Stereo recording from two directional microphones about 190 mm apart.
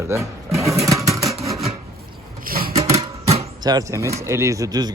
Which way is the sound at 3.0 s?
30° right (ahead or behind).